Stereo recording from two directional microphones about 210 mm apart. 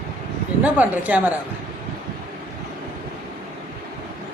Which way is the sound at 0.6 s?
5° right (ahead or behind).